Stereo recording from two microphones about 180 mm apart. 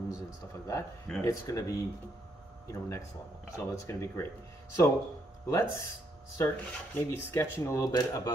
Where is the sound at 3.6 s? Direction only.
15° left (ahead or behind).